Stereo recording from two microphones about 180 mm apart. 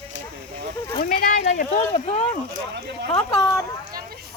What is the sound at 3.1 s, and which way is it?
Speech, 25° left (ahead or behind).